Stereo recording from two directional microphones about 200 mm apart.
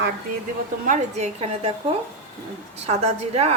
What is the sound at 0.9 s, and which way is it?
Speech, 35° right (ahead or behind).